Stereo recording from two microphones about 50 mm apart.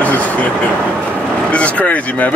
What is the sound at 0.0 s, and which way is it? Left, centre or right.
Vehicle, left.